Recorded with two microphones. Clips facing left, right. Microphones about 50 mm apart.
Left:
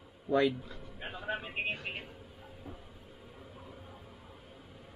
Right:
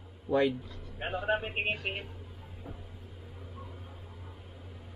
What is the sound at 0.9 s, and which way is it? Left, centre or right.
Speech, right.